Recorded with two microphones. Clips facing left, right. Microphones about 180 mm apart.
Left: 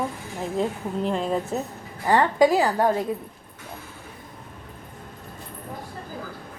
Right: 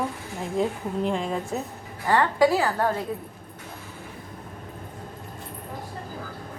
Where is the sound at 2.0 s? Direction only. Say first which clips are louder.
Left 2 dB; 20° left (ahead or behind).